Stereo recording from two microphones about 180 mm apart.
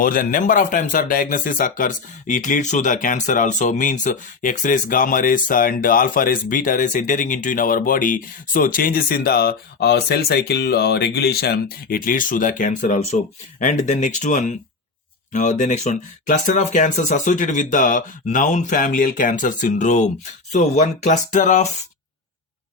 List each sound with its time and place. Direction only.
0.0 s speech: 50° left (ahead or behind)